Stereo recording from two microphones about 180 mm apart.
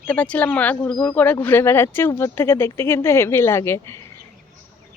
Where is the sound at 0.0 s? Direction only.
10° left (ahead or behind).